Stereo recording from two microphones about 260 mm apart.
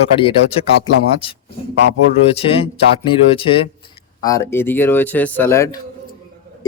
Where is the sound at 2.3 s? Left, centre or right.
Left.